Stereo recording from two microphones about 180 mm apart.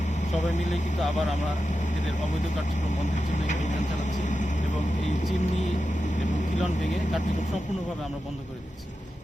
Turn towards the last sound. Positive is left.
turn(degrees=45)  # may be behind; listen again after turning